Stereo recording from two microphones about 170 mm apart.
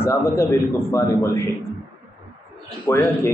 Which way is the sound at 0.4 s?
15° left (ahead or behind).